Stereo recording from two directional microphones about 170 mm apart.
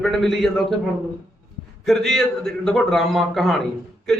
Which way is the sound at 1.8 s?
Centre (ahead or behind).